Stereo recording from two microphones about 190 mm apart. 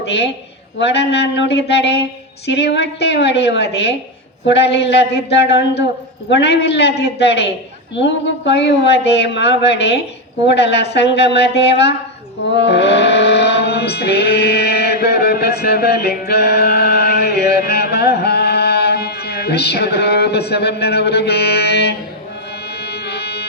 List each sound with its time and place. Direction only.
0.8 s speech: 65° left (ahead or behind)
12.5 s music: 65° left (ahead or behind)